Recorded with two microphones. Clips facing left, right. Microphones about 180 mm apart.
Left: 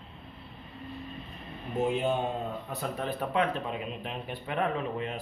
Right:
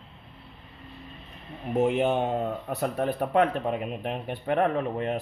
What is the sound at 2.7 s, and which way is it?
Speech, 55° right (ahead or behind).